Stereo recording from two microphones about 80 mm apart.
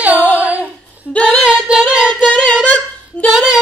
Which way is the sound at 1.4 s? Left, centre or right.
Centre.